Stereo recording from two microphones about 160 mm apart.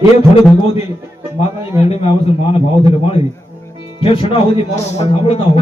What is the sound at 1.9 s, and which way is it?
Speech, 40° left (ahead or behind).